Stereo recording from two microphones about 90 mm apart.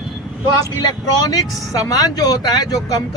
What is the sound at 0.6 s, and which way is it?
Speech, 45° left (ahead or behind).